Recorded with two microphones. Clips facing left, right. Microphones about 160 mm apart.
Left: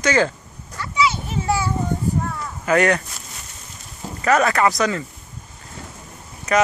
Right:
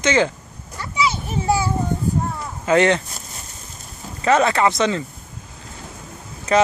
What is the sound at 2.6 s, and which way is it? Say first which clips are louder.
Speech: right 2 dB; 25° right (ahead or behind).